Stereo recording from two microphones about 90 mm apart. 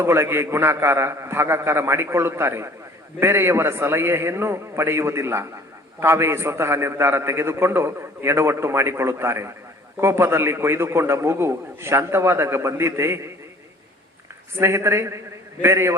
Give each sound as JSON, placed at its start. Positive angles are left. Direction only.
{"t": 0.0, "sound": "a man's voice", "side_deg": -25}
{"t": 14.5, "sound": "a man's voice", "side_deg": -30}